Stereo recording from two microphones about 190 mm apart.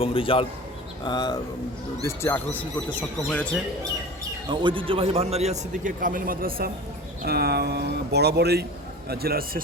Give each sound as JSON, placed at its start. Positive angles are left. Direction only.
{"t": 0.0, "sound": "a man's voice", "side_deg": 30}
{"t": 4.4, "sound": "a man's voice", "side_deg": -25}